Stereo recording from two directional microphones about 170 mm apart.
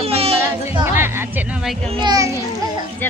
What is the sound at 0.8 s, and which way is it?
A child's voice, 15° right (ahead or behind).